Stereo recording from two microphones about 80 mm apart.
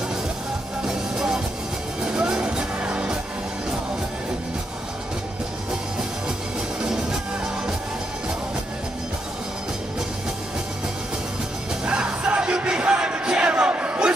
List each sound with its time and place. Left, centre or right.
0.8 s music: centre
6.8 s music: centre
11.8 s music: centre